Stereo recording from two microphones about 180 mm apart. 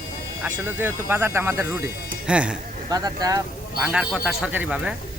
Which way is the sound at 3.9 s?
5° right (ahead or behind).